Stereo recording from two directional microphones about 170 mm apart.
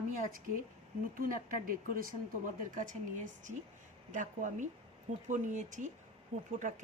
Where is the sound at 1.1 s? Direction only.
55° right (ahead or behind).